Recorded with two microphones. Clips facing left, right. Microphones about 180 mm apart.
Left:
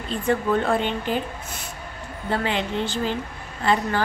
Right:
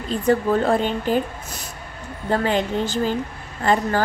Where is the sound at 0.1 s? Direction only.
35° right (ahead or behind).